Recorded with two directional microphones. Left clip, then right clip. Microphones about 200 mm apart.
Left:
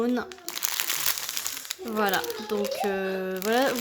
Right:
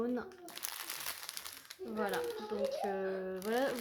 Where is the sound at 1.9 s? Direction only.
35° left (ahead or behind).